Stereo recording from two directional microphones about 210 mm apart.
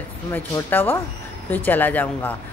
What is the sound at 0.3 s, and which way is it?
Speech, 10° left (ahead or behind).